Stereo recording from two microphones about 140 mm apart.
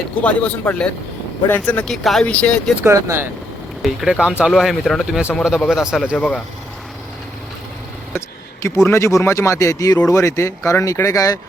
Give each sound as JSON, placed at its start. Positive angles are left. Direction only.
{"t": 0.2, "sound": "speech", "side_deg": 10}
{"t": 2.8, "sound": "speech", "side_deg": -20}
{"t": 3.8, "sound": "speech", "side_deg": -5}
{"t": 6.1, "sound": "speech", "side_deg": 5}
{"t": 8.6, "sound": "speech", "side_deg": 20}